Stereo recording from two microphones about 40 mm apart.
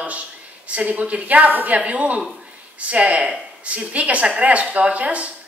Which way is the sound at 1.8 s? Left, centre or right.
Right.